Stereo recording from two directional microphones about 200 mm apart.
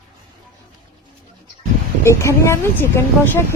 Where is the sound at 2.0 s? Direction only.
15° left (ahead or behind).